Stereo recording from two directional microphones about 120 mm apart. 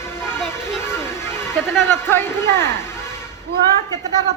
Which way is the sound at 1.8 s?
20° left (ahead or behind).